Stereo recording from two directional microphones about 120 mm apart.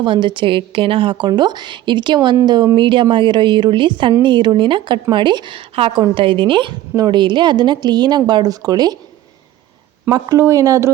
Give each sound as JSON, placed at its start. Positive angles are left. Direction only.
{"t": 0.0, "sound": "a woman's voice", "side_deg": -45}
{"t": 10.1, "sound": "speech", "side_deg": -30}